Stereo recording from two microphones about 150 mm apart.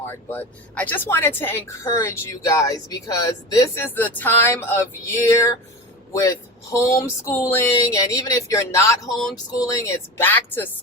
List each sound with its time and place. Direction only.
0.0 s a woman's voice: 15° left (ahead or behind)
3.9 s a woman's voice: 10° left (ahead or behind)